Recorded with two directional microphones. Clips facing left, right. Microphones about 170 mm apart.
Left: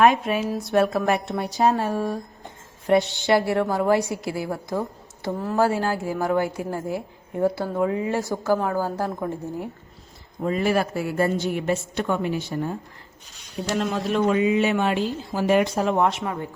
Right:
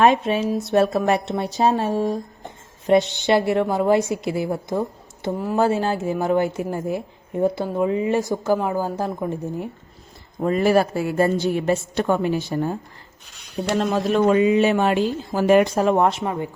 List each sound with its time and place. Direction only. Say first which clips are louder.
0.0 s a woman's voice: right 2 dB; 25° right (ahead or behind)
10.4 s a woman's voice: right 4 dB; 45° right (ahead or behind)
13.7 s a woman's voice: right 4 dB; 40° right (ahead or behind)
15.4 s speech: right 4 dB; 50° right (ahead or behind)
16.2 s a woman's voice: right 4 dB; 25° right (ahead or behind)